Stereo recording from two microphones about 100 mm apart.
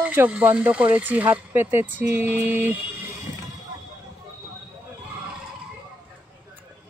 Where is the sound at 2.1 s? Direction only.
20° right (ahead or behind).